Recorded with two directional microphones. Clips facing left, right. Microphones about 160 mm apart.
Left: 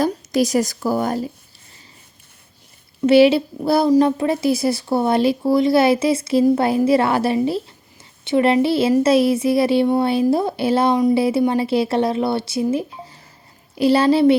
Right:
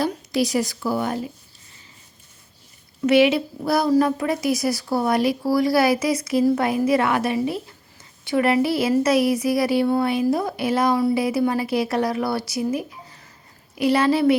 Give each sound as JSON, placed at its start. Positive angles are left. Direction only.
{"t": 0.0, "sound": "a woman's voice", "side_deg": 45}
{"t": 3.1, "sound": "speech", "side_deg": 30}